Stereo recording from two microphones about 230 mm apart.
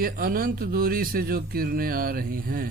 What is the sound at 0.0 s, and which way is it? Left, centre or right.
Speech, right.